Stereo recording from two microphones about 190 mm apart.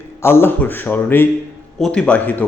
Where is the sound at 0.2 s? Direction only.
15° left (ahead or behind).